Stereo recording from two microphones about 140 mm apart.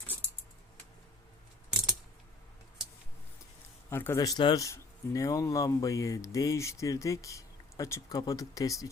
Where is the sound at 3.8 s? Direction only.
15° left (ahead or behind).